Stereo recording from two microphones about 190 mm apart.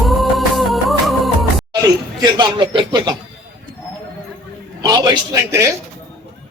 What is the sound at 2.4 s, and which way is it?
Speech, 25° right (ahead or behind).